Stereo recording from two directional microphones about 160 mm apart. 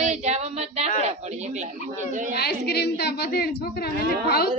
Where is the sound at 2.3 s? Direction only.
85° left.